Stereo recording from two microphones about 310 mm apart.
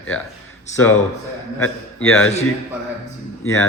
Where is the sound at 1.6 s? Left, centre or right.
Centre.